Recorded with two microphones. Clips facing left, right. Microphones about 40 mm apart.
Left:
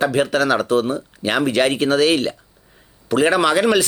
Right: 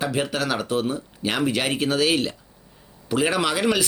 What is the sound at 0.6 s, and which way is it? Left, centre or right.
Speech, centre.